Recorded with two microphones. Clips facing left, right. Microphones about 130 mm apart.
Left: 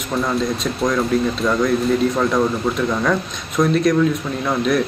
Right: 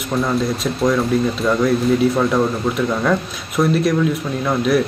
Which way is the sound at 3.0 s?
5° right (ahead or behind).